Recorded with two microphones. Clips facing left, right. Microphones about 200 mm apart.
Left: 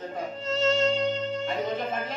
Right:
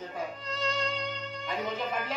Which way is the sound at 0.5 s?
25° left (ahead or behind).